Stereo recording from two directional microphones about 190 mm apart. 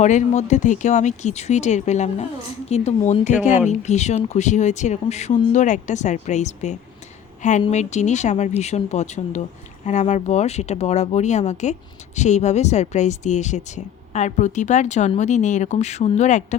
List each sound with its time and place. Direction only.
0.0 s speech: 40° left (ahead or behind)